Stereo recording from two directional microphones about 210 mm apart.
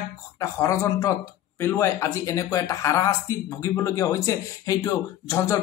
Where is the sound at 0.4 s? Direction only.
15° left (ahead or behind).